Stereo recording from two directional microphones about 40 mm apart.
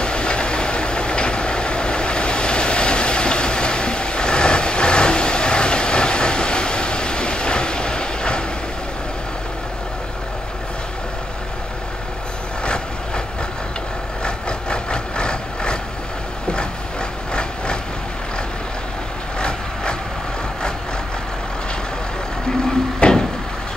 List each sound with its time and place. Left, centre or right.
0.0 s train: left
12.6 s train: left
14.2 s vehicle: left
17.3 s train: left
19.4 s vehicle: left
22.9 s a sound: left